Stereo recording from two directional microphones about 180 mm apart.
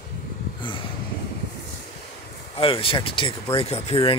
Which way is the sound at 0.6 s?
25° left (ahead or behind).